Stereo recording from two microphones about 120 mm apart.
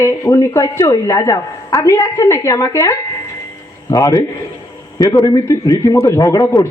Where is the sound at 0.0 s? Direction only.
25° left (ahead or behind).